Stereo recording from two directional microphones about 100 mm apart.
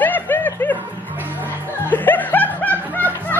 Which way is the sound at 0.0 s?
20° left (ahead or behind).